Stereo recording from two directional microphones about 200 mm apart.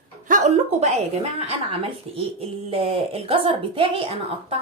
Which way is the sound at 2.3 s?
30° right (ahead or behind).